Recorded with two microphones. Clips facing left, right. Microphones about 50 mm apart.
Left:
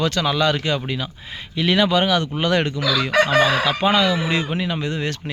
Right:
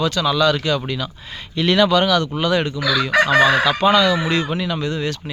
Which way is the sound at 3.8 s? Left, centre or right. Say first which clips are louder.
Right 3 dB; centre.